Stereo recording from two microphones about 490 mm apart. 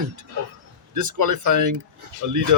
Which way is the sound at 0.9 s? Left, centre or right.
Right.